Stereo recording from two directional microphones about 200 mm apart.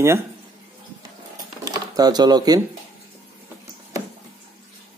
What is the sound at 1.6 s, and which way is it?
Speech, 20° right (ahead or behind).